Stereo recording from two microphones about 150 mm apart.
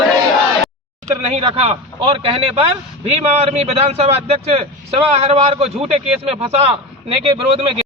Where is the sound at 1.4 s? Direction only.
40° right (ahead or behind).